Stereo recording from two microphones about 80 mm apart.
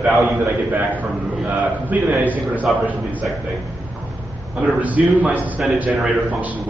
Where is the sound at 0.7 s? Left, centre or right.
Right.